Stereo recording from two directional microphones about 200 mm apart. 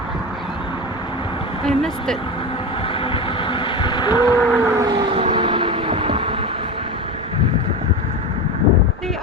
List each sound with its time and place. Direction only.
1.6 s speech: centre (ahead or behind)
3.0 s vehicle: 25° left (ahead or behind)
4.2 s vehicle: 15° right (ahead or behind)
5.1 s vehicle: 25° right (ahead or behind)